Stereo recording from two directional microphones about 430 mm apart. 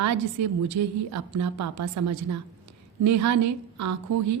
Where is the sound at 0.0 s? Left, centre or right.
Right.